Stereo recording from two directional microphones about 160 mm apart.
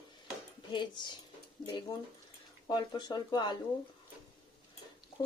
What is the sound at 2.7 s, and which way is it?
Cutlery, 30° left (ahead or behind).